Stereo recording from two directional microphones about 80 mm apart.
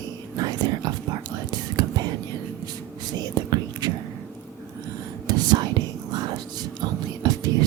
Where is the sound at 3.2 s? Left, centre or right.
Right.